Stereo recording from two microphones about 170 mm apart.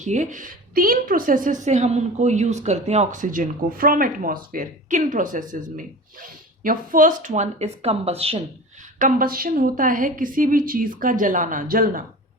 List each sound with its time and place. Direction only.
0.0 s a woman's voice: 45° right (ahead or behind)
9.0 s a woman's voice: 55° right (ahead or behind)